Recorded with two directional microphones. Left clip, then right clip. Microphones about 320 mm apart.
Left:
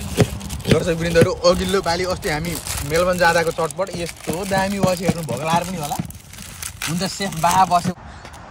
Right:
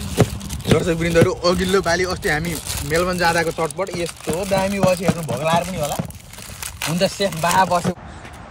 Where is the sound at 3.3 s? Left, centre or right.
Right.